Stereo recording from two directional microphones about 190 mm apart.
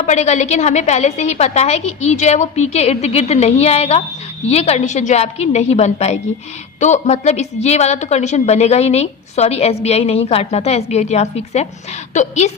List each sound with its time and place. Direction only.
0.0 s a woman's voice: 35° left (ahead or behind)